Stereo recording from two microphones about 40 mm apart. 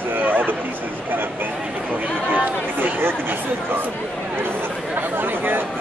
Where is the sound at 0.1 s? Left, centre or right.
Right.